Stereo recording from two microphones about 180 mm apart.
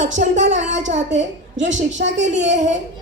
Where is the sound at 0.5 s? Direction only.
90° right.